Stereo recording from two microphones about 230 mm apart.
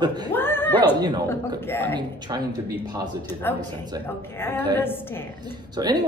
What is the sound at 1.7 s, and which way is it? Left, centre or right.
Speech, centre.